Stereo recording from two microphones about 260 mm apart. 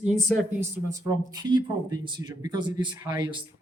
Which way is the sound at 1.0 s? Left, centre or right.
Centre.